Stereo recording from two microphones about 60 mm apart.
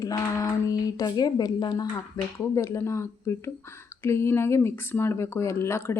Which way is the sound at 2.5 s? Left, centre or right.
Left.